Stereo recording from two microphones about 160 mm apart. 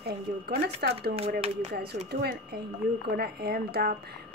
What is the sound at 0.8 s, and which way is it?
Speech, 75° right (ahead or behind).